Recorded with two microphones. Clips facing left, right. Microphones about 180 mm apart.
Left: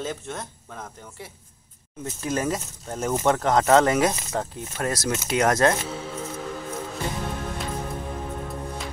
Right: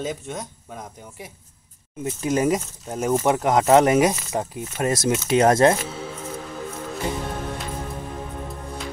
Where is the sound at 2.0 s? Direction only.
20° right (ahead or behind).